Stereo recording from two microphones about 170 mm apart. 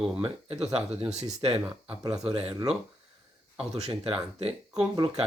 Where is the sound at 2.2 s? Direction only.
35° right (ahead or behind).